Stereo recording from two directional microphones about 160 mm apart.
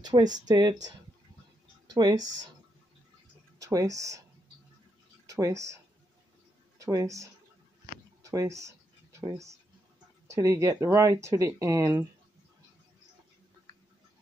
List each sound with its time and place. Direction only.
0.0 s speech: 25° right (ahead or behind)
1.9 s speech: 25° right (ahead or behind)
3.5 s speech: 20° right (ahead or behind)
5.2 s a sound: 20° right (ahead or behind)
6.8 s speech: 20° right (ahead or behind)
8.2 s a sound: 20° right (ahead or behind)
10.2 s speech: 20° right (ahead or behind)